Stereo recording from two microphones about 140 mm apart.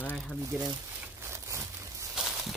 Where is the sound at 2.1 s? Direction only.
5° right (ahead or behind).